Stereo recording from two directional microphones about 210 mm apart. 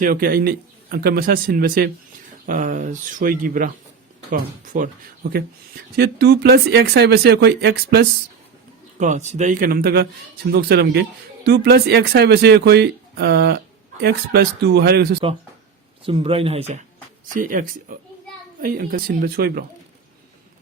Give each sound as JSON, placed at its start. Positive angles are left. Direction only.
{"t": 0.0, "sound": "speech", "side_deg": -45}
{"t": 6.0, "sound": "speech", "side_deg": -50}
{"t": 9.0, "sound": "speech", "side_deg": -35}
{"t": 16.0, "sound": "speech", "side_deg": -25}
{"t": 17.3, "sound": "speech", "side_deg": -40}